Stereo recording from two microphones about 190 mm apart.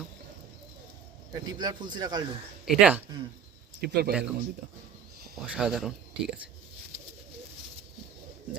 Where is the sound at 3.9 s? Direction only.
55° right (ahead or behind).